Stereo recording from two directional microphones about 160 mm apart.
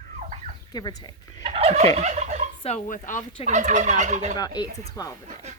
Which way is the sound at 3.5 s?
50° right (ahead or behind).